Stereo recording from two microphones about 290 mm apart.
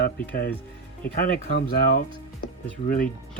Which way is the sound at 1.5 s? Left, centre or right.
Left.